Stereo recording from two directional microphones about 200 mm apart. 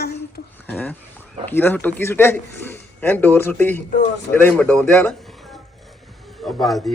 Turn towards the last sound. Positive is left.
turn(degrees=0)  # may be behind; listen again after turning